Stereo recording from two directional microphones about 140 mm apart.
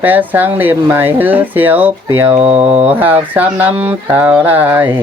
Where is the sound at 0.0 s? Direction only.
10° right (ahead or behind).